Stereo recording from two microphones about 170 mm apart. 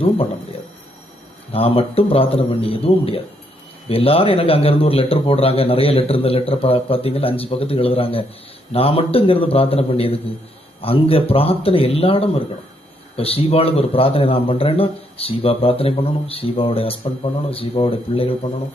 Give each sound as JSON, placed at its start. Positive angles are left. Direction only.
{"t": 1.5, "sound": "a man's voice", "side_deg": 35}